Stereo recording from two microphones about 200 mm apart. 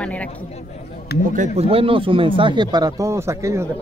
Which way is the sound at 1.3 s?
35° right (ahead or behind).